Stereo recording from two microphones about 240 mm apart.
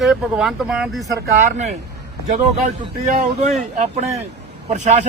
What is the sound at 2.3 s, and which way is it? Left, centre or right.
Speech, right.